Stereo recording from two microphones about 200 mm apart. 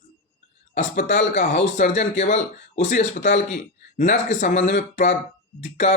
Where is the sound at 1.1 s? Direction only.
40° left (ahead or behind).